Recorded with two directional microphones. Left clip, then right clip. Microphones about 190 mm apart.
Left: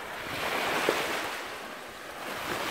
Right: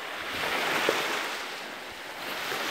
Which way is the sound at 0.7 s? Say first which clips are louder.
Right 1 dB; 50° left (ahead or behind).